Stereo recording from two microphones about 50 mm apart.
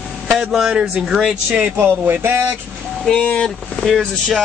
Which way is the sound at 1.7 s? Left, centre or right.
Right.